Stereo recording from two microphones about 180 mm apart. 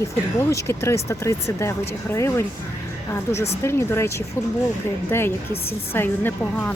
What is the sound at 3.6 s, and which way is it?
Speech, 15° left (ahead or behind).